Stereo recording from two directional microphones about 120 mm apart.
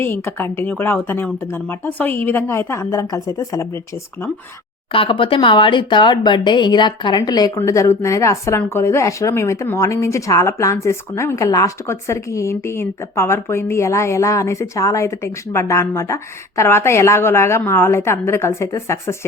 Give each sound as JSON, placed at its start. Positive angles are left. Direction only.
{"t": 0.0, "sound": "speech", "side_deg": 20}
{"t": 4.9, "sound": "speech", "side_deg": 45}